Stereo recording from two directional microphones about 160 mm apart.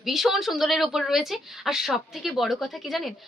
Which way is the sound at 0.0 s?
Centre (ahead or behind).